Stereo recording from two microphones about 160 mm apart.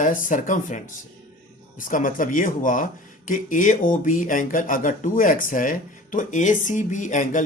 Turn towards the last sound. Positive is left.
turn(degrees=50)  # may be behind; listen again after turning